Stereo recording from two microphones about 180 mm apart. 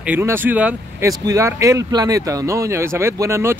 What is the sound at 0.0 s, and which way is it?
A woman's voice, 10° right (ahead or behind).